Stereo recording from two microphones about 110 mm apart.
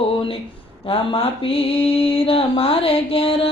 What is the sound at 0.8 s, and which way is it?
Mantra, 55° left (ahead or behind).